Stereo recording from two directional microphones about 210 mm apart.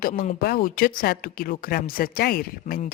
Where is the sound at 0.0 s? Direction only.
40° left (ahead or behind).